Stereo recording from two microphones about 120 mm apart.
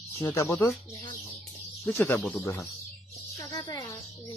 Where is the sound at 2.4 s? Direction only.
25° left (ahead or behind).